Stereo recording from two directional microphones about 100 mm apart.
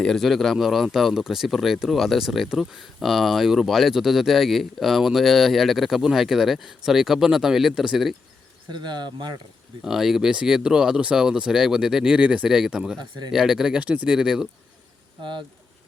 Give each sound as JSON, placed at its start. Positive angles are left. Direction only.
{"t": 0.0, "sound": "speech", "side_deg": 5}
{"t": 8.7, "sound": "speech", "side_deg": -50}
{"t": 9.8, "sound": "speech", "side_deg": -5}
{"t": 13.0, "sound": "speech", "side_deg": -45}
{"t": 13.3, "sound": "speech", "side_deg": -5}
{"t": 15.2, "sound": "speech", "side_deg": -55}